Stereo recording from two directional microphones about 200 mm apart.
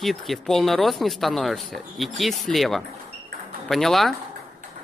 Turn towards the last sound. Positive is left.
turn(degrees=0)  # may be behind; listen again after turning